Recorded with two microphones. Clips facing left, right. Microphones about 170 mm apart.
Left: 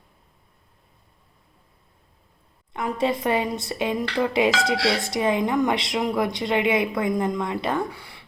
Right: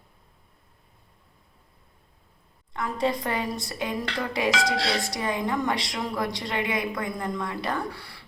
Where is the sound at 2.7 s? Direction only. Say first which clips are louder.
Left 3 dB; 20° left (ahead or behind).